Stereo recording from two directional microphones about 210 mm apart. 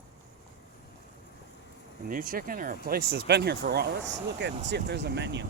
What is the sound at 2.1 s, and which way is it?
Speech, 40° right (ahead or behind).